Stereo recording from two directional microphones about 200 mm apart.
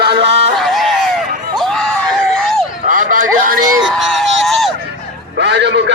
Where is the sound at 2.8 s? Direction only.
45° right (ahead or behind).